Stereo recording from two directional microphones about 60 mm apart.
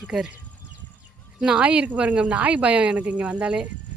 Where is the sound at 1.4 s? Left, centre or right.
Centre.